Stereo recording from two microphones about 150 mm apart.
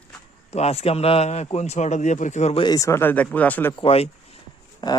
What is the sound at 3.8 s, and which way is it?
Speech, 40° left (ahead or behind).